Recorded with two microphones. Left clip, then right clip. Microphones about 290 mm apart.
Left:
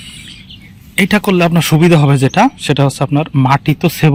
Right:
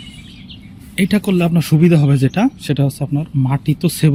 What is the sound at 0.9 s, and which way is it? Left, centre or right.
Speech, centre.